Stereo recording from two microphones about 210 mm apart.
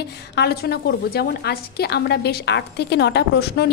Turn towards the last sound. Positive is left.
turn(degrees=50)  # may be behind; listen again after turning